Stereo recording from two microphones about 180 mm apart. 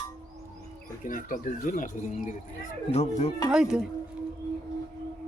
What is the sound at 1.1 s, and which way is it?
Speech, 45° left (ahead or behind).